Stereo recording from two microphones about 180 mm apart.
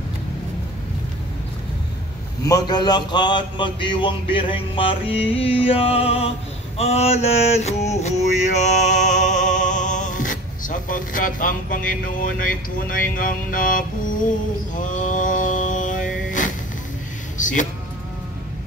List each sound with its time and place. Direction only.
2.4 s speech: 20° left (ahead or behind)
6.8 s male singing: 35° left (ahead or behind)
8.0 s music: 40° left (ahead or behind)
13.1 s mantra: 50° left (ahead or behind)
14.8 s a sound: 45° left (ahead or behind)